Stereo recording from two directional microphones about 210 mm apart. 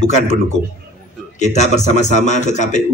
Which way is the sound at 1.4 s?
35° left (ahead or behind).